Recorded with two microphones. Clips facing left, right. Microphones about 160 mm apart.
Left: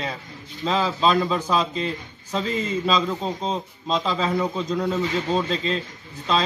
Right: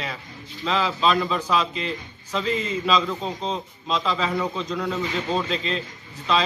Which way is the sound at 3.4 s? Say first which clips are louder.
Left 2 dB; 40° left (ahead or behind).